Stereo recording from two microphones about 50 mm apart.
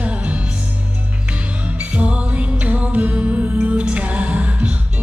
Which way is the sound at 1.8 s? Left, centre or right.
Right.